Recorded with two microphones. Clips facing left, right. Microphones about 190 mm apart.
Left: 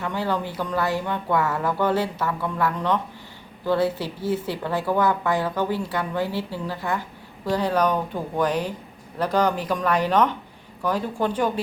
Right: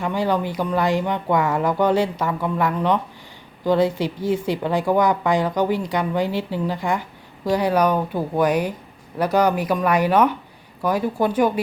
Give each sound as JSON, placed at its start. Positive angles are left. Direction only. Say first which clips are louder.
{"t": 0.0, "sound": "a woman's voice", "louder": "right 4 dB", "side_deg": -15}